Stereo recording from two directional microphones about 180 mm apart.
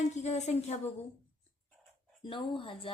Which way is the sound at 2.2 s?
30° left (ahead or behind).